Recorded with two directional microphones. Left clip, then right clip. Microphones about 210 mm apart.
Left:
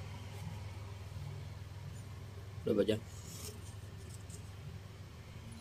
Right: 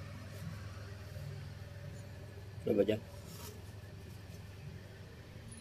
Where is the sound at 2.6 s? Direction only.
15° left (ahead or behind).